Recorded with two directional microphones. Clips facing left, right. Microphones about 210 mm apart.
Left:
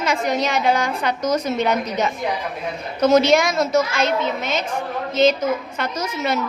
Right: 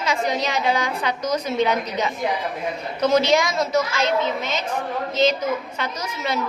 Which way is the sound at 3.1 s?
50° left (ahead or behind).